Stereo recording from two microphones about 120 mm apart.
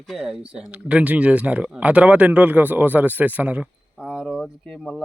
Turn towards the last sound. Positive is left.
turn(degrees=0)  # may be behind; listen again after turning